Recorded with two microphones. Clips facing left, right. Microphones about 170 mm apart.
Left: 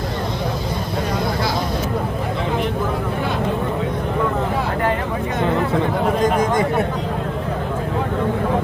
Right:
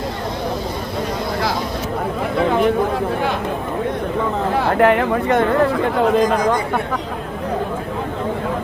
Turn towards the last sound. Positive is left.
turn(degrees=25)  # may be behind; listen again after turning